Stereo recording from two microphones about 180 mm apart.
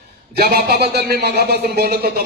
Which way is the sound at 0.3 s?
60° right (ahead or behind).